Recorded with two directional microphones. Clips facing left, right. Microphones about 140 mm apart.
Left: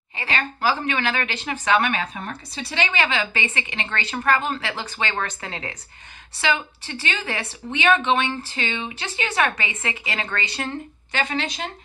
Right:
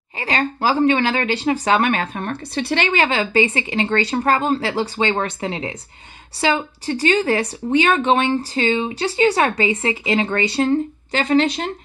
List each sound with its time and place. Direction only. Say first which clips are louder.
0.2 s a woman's voice: right 4 dB; 35° right (ahead or behind)
6.3 s a woman's voice: right 5 dB; 35° right (ahead or behind)